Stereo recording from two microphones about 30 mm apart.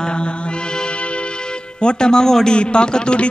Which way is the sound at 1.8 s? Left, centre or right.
Left.